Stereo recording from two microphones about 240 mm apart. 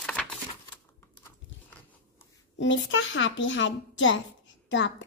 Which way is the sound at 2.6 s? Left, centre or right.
Left.